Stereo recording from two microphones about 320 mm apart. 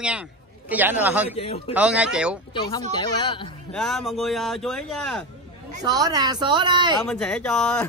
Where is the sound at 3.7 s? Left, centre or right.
Centre.